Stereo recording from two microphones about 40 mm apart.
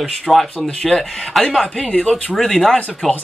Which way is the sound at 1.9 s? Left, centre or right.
Left.